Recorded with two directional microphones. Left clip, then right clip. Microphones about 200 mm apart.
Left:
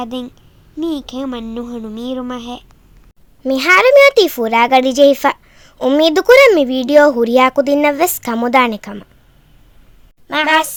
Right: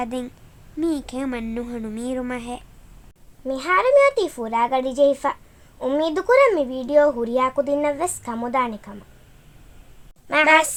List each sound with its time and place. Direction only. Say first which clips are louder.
0.0 s speech: left 3 dB; 15° left (ahead or behind)
3.4 s speech: left 9 dB; 45° left (ahead or behind)
10.2 s speech: left 2 dB; 15° left (ahead or behind)